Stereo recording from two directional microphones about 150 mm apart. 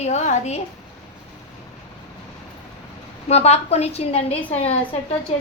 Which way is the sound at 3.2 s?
45° left (ahead or behind).